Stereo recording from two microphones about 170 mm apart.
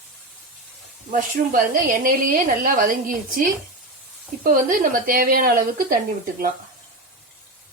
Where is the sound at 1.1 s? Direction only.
55° right (ahead or behind).